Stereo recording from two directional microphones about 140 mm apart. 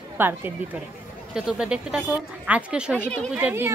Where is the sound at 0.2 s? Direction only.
15° right (ahead or behind).